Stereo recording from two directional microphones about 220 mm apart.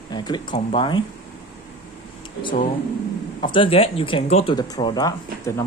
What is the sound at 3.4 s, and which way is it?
Speech, 25° left (ahead or behind).